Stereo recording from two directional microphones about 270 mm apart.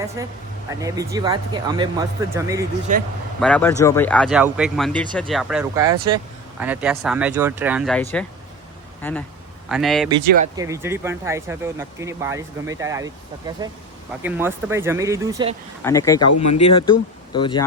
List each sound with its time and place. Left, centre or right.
0.2 s speech: centre
2.9 s a man's voice: right
3.4 s speech: centre
10.2 s speech: centre
15.8 s speech: centre
16.2 s speech: left
17.3 s speech: centre